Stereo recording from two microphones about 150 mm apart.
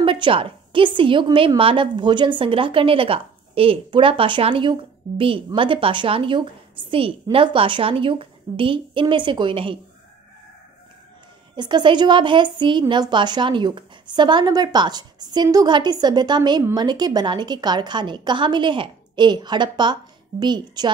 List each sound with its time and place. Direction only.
0.0 s a woman's voice: 35° right (ahead or behind)
11.5 s a woman's voice: 30° right (ahead or behind)